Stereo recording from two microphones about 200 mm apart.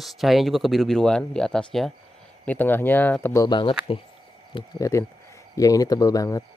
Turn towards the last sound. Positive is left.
turn(degrees=15)  # may be behind; listen again after turning